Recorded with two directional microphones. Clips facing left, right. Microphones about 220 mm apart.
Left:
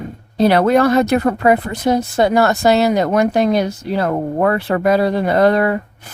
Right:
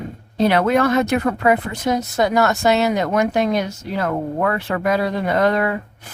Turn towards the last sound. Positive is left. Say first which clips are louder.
# left 4 dB
turn(degrees=40)  # may be behind; listen again after turning